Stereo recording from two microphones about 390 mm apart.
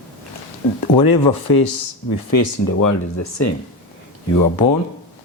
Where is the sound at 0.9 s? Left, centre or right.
Left.